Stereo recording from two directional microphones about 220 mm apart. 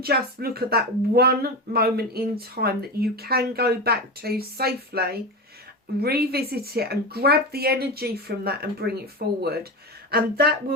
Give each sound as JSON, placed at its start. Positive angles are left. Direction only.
{"t": 0.0, "sound": "speech", "side_deg": -45}